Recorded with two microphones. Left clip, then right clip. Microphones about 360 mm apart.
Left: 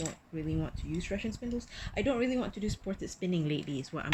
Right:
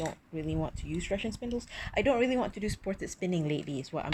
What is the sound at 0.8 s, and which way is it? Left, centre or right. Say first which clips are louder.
Speech: right 3 dB; centre.